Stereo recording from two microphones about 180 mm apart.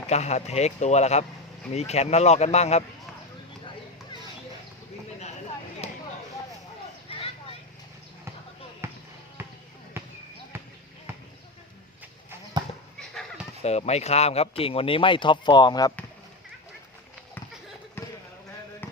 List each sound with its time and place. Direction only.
0.1 s speech: 40° left (ahead or behind)
5.8 s a sound: 35° left (ahead or behind)
7.1 s vehicle: 30° left (ahead or behind)
8.8 s basketball bounce: 15° right (ahead or behind)
12.6 s dog: 25° right (ahead or behind)
13.6 s speech: 35° left (ahead or behind)